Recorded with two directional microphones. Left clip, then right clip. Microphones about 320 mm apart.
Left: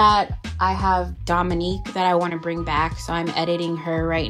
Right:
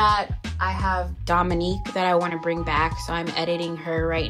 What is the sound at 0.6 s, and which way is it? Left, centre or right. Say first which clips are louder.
Speech: left 5 dB; centre.